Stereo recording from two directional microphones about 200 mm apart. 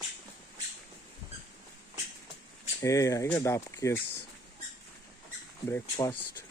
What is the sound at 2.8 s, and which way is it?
Speech, 15° left (ahead or behind).